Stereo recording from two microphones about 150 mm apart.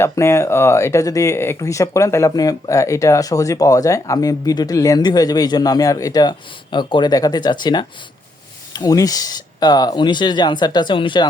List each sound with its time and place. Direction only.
0.0 s speech: 20° left (ahead or behind)